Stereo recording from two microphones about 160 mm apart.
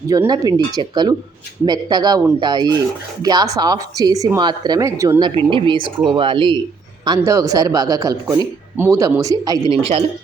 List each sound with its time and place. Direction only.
0.1 s speech: 20° right (ahead or behind)
5.4 s speech: 35° right (ahead or behind)